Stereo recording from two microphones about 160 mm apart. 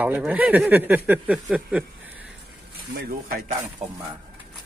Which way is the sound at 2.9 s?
70° right (ahead or behind).